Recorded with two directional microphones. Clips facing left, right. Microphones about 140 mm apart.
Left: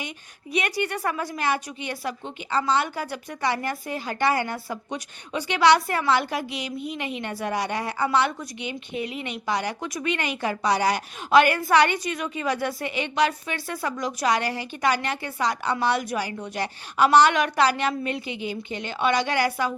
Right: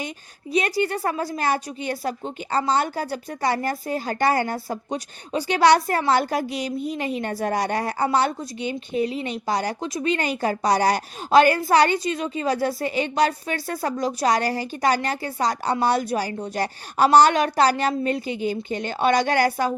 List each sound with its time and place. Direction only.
0.8 s a woman's voice: 30° right (ahead or behind)